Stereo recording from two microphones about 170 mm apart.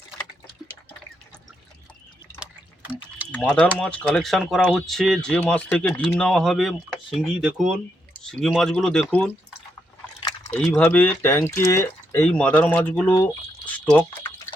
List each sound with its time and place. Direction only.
3.3 s speech: 5° left (ahead or behind)
10.7 s speech: 10° left (ahead or behind)